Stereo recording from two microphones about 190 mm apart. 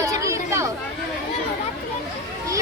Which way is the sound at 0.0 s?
15° right (ahead or behind).